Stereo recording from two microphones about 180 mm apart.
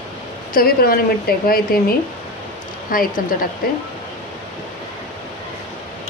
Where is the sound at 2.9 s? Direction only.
50° left (ahead or behind).